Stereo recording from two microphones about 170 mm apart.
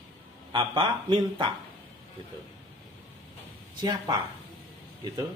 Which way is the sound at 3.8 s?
25° right (ahead or behind).